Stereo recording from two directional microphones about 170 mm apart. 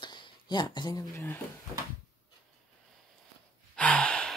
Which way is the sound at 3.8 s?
5° left (ahead or behind).